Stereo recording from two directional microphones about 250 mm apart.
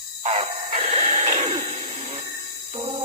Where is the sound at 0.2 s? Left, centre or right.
Right.